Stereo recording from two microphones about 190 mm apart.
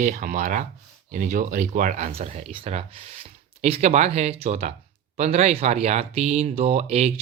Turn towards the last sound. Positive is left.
turn(degrees=-35)  # may be behind; listen again after turning